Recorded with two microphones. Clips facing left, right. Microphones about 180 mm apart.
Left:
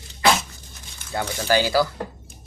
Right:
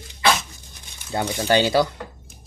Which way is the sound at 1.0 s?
15° right (ahead or behind).